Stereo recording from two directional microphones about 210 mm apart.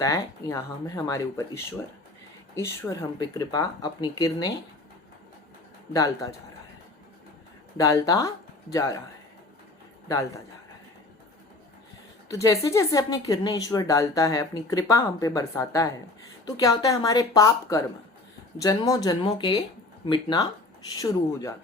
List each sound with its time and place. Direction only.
0.0 s a woman's voice: 15° left (ahead or behind)
5.9 s a woman's voice: 15° left (ahead or behind)
7.8 s a woman's voice: 15° left (ahead or behind)
10.1 s a woman's voice: 15° left (ahead or behind)
12.3 s a woman's voice: 15° left (ahead or behind)